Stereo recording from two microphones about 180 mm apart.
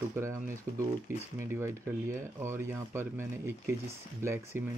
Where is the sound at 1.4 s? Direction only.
15° right (ahead or behind).